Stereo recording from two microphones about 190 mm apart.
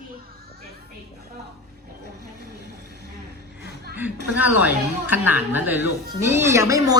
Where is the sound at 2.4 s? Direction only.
60° right (ahead or behind).